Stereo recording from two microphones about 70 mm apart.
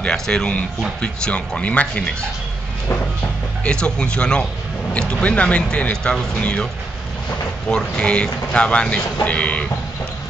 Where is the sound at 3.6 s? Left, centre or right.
Centre.